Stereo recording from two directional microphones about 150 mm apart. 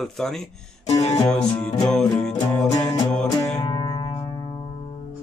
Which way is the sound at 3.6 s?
30° left (ahead or behind).